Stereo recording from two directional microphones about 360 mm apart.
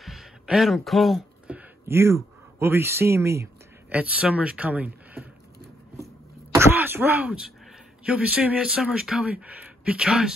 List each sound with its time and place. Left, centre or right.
0.0 s a sound: centre
6.5 s throat clearing: centre
8.0 s speech: centre